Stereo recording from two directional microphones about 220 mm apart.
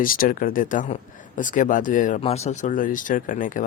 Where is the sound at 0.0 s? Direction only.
40° left (ahead or behind).